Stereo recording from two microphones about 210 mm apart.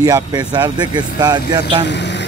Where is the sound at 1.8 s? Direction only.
55° left (ahead or behind).